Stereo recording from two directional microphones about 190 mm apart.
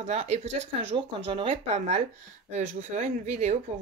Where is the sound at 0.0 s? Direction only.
35° right (ahead or behind).